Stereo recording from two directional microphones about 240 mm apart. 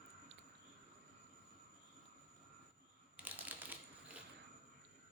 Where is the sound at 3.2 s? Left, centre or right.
Centre.